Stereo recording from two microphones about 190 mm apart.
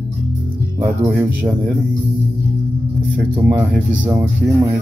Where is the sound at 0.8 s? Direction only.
15° right (ahead or behind).